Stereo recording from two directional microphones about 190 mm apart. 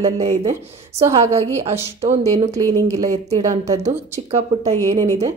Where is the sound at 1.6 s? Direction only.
35° right (ahead or behind).